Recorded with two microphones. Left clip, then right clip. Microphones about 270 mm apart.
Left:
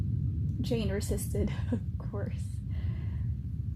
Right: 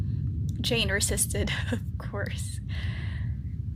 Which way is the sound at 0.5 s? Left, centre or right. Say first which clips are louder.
Right 8 dB; right.